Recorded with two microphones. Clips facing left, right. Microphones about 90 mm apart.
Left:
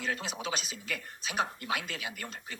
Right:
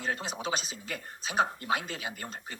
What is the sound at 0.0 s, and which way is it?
Speech, 35° right (ahead or behind).